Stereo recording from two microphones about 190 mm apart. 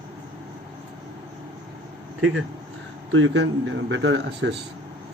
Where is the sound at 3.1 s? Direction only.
85° right.